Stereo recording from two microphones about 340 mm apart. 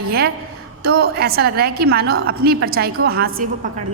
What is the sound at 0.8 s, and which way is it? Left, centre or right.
A woman's voice, right.